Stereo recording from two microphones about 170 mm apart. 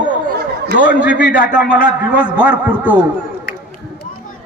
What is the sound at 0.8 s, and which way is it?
Speech, 55° left (ahead or behind).